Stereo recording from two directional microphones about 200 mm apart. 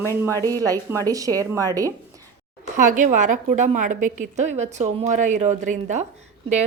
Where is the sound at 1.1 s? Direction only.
15° right (ahead or behind).